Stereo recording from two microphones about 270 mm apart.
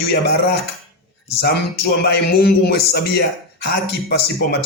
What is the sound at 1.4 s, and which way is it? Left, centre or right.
A man's voice, left.